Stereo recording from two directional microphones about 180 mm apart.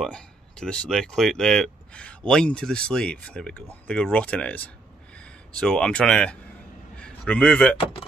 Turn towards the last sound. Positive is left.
turn(degrees=5)  # may be behind; listen again after turning